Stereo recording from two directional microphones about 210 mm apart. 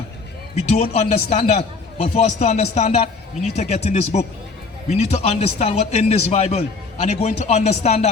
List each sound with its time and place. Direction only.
0.5 s a man's voice: 30° left (ahead or behind)